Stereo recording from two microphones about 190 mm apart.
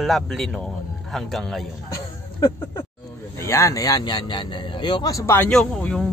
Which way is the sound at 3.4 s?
15° left (ahead or behind).